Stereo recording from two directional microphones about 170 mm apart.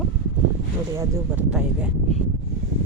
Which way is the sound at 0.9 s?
10° right (ahead or behind).